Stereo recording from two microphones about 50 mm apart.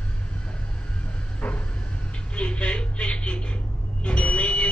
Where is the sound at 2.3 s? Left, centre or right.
Left.